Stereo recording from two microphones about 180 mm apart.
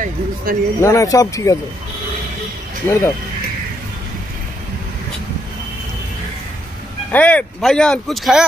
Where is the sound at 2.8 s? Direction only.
10° left (ahead or behind).